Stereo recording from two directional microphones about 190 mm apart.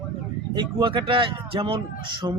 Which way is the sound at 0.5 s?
25° right (ahead or behind).